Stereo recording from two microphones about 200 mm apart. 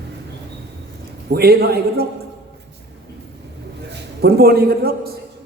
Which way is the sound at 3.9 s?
50° right (ahead or behind).